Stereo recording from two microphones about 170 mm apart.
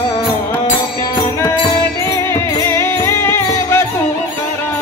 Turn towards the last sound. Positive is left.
turn(degrees=15)  # may be behind; listen again after turning